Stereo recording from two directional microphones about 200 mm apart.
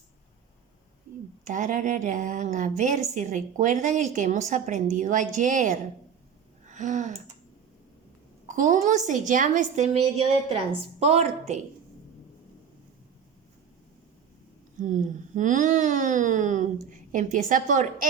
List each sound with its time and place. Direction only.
1.5 s a woman's voice: 40° right (ahead or behind)
6.7 s a sound: 35° right (ahead or behind)
8.4 s a woman's voice: 40° right (ahead or behind)
14.8 s a woman's voice: 40° right (ahead or behind)